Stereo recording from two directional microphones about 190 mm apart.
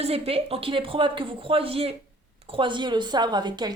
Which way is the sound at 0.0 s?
30° right (ahead or behind).